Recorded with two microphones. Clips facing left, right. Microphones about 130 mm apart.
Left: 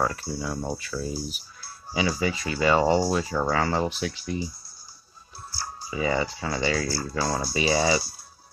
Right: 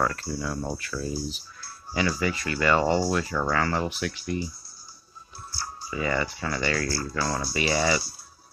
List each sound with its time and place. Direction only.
0.0 s speech: 15° left (ahead or behind)
5.9 s speech: 20° left (ahead or behind)